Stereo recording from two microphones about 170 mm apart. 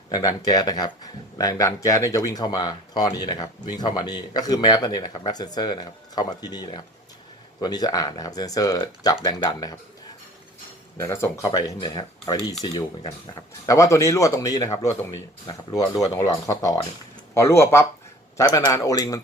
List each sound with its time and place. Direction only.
0.1 s speech: 20° left (ahead or behind)
10.9 s speech: 15° left (ahead or behind)